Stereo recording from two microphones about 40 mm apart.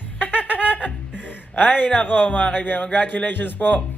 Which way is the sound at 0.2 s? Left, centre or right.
Left.